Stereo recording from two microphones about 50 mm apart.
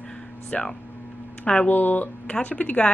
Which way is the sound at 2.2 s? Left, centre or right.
Left.